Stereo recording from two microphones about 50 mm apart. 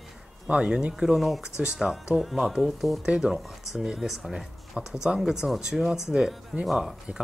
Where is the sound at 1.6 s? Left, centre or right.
Centre.